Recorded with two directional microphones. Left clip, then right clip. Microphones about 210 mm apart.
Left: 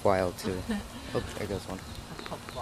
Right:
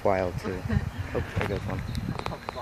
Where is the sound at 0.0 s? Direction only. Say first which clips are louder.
Right 1 dB; 5° left (ahead or behind).